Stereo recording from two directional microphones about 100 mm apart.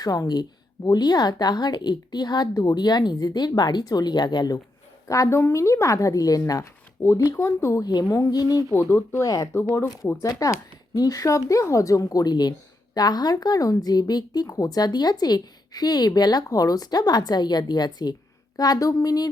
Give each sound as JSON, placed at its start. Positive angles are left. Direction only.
{"t": 0.0, "sound": "a woman's voice", "side_deg": 40}
{"t": 5.0, "sound": "speech", "side_deg": 35}
{"t": 8.9, "sound": "speech", "side_deg": 25}
{"t": 9.2, "sound": "speech", "side_deg": 35}